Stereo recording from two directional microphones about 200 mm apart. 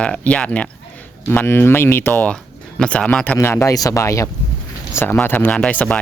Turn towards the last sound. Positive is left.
turn(degrees=5)  # may be behind; listen again after turning